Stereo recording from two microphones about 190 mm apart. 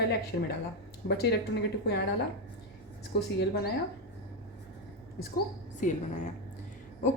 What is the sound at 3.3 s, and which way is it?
Speech, 55° left (ahead or behind).